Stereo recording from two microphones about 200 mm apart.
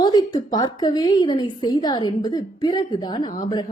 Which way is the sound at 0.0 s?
20° left (ahead or behind).